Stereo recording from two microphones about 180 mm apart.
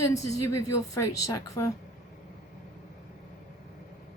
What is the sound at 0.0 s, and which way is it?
A woman's voice, 15° left (ahead or behind).